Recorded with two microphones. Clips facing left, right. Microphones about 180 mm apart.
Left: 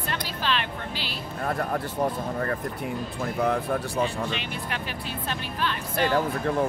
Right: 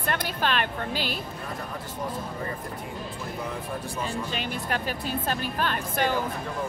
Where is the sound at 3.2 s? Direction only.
65° left (ahead or behind).